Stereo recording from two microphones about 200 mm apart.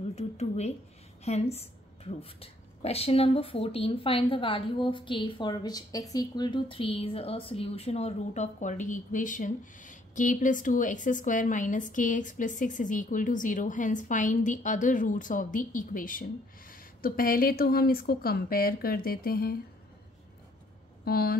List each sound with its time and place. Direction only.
0.1 s speech: 35° left (ahead or behind); by 19.5 s 50° left (ahead or behind)
21.0 s speech: 50° left (ahead or behind)